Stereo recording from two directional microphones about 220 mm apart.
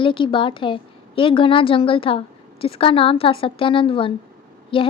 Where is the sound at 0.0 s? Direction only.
20° left (ahead or behind).